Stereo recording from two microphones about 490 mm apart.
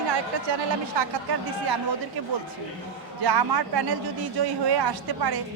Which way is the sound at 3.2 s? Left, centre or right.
Right.